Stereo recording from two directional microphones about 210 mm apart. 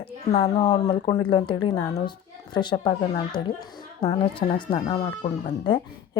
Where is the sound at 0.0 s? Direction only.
25° left (ahead or behind).